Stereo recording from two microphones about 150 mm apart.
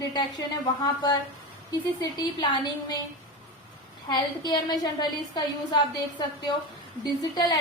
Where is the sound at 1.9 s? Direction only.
30° left (ahead or behind).